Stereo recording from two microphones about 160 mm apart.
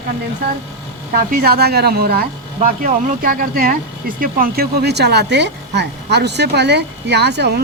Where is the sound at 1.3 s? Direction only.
70° right (ahead or behind).